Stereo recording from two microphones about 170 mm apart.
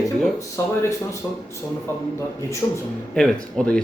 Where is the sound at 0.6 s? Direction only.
20° left (ahead or behind).